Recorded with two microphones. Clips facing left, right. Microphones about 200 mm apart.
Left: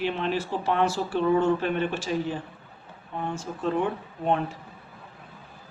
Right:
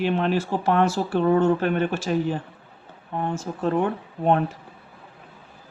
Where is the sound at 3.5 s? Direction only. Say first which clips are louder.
Right 4 dB; 50° right (ahead or behind).